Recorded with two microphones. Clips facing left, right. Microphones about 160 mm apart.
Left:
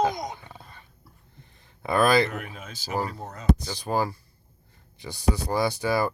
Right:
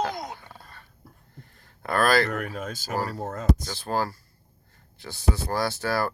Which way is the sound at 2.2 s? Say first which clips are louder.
Right 5 dB; 45° right (ahead or behind).